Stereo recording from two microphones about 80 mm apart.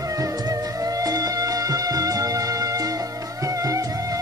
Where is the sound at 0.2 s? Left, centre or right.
Right.